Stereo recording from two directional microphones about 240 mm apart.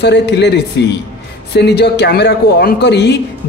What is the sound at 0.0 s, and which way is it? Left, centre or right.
Speech, left.